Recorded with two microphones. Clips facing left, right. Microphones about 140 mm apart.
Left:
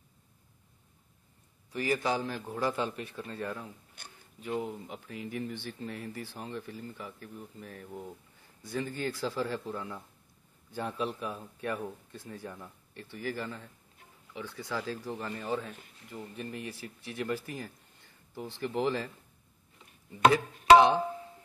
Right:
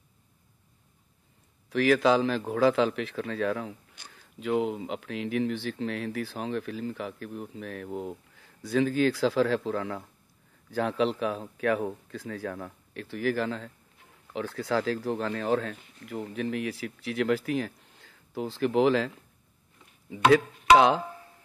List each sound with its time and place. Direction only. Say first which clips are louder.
1.7 s speech: right 8 dB; 90° right
4.0 s a sound: right 1 dB; 55° left (ahead or behind)
4.4 s speech: right 8 dB; 90° right
20.7 s speech: even; 90° right